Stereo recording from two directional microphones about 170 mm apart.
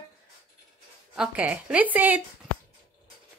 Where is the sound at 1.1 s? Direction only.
5° right (ahead or behind).